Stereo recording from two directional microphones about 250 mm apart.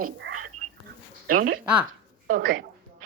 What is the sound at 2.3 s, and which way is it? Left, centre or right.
Speech, right.